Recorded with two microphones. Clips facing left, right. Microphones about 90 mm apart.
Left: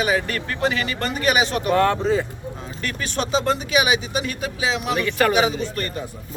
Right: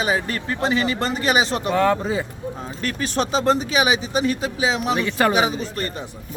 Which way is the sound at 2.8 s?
35° right (ahead or behind).